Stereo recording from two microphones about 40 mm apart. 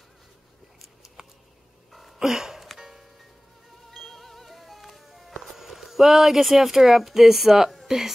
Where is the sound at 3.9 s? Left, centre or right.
Centre.